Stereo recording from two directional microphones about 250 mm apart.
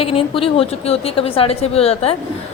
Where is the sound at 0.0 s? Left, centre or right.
Left.